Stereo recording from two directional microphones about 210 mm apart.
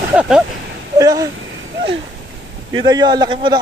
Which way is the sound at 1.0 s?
15° right (ahead or behind).